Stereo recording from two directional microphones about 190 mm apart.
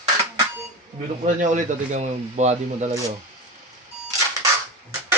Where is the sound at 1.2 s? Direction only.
40° right (ahead or behind).